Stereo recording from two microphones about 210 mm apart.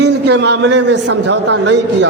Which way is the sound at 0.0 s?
55° right (ahead or behind).